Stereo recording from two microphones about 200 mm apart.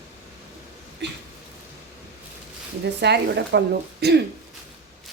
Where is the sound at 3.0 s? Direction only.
55° right (ahead or behind).